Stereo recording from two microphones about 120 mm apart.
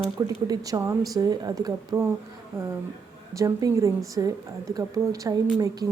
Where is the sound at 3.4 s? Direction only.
25° right (ahead or behind).